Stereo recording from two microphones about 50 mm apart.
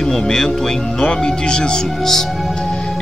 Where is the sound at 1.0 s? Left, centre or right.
Left.